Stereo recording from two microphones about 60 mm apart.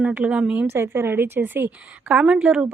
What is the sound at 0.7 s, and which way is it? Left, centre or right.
A woman's voice, right.